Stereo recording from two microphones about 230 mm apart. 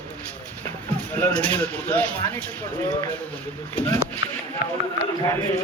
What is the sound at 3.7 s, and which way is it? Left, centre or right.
Speech, centre.